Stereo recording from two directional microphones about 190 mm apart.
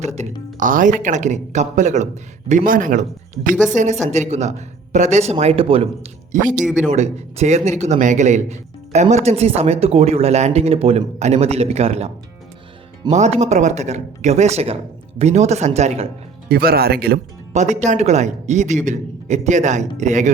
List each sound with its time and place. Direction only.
0.2 s a man's voice: 40° right (ahead or behind)
6.6 s speech: centre (ahead or behind)
6.9 s a man's voice: 35° right (ahead or behind)
16.5 s speech: 55° right (ahead or behind)
17.5 s a man's voice: 35° right (ahead or behind)